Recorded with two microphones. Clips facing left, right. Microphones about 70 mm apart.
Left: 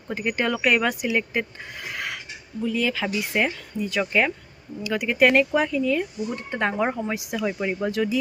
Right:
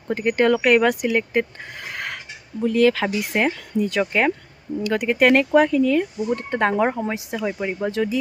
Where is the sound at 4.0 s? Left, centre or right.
Right.